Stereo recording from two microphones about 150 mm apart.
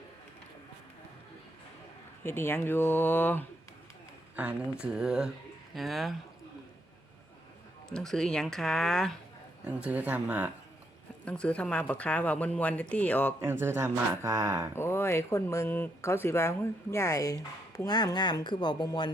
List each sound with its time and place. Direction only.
2.2 s speech: 15° left (ahead or behind)
4.4 s speech: 10° right (ahead or behind)
7.9 s speech: 5° left (ahead or behind)
9.6 s speech: 10° right (ahead or behind)
11.3 s speech: 5° left (ahead or behind)
13.4 s speech: 15° right (ahead or behind)
14.8 s speech: 15° left (ahead or behind)